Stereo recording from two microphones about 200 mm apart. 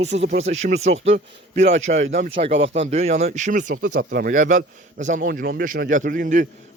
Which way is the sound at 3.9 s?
55° right (ahead or behind).